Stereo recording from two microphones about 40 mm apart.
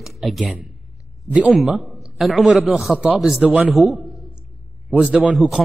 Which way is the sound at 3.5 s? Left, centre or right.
Right.